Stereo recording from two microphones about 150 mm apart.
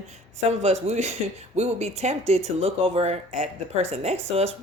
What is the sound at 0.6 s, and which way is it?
Speech, 45° right (ahead or behind).